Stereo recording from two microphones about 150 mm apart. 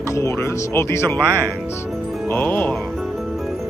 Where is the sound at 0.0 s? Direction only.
20° left (ahead or behind).